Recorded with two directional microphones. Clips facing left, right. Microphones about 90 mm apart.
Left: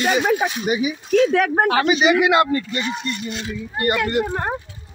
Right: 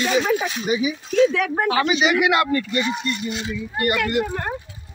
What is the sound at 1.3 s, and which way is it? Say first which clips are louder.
Speech: left 3 dB; 50° left (ahead or behind).